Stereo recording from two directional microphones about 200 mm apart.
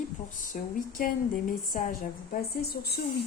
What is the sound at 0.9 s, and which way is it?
A woman's voice, 45° left (ahead or behind).